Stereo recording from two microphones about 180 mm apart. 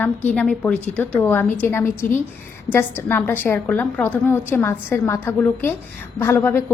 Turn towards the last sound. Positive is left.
turn(degrees=10)  # may be behind; listen again after turning